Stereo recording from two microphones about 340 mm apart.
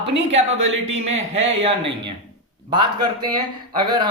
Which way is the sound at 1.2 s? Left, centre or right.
Centre.